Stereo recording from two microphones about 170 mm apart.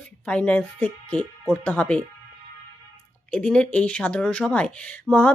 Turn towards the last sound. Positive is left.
turn(degrees=10)  # may be behind; listen again after turning